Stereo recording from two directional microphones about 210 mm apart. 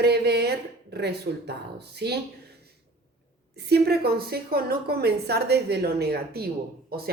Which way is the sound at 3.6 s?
50° right (ahead or behind).